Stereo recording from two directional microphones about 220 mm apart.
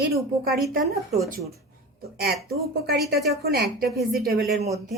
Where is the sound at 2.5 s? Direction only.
45° right (ahead or behind).